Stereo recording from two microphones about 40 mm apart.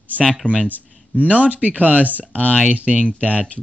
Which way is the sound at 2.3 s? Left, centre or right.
Left.